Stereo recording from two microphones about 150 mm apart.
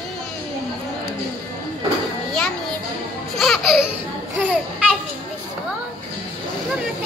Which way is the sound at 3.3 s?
Centre (ahead or behind).